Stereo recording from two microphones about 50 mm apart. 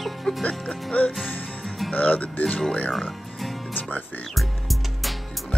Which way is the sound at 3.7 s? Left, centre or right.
Left.